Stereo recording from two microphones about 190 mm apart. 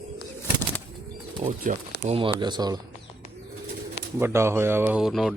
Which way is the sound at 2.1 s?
30° right (ahead or behind).